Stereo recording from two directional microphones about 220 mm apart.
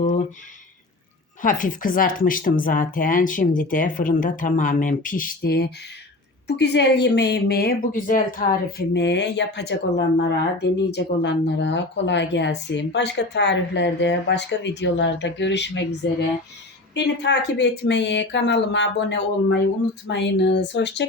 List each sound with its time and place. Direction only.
1.4 s speech: 35° left (ahead or behind)
16.9 s speech: 50° left (ahead or behind)